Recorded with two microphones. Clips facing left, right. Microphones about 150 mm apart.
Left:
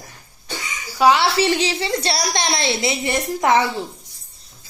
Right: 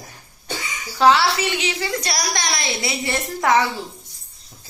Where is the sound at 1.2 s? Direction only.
30° left (ahead or behind).